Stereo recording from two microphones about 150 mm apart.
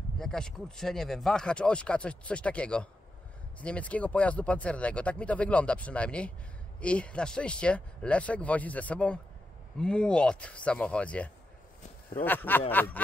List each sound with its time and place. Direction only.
0.2 s speech: 5° left (ahead or behind)